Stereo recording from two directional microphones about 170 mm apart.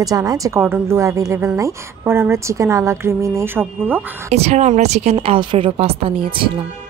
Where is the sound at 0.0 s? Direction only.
20° right (ahead or behind).